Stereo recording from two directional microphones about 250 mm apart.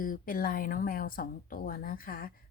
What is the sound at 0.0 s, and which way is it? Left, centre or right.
Speech, left.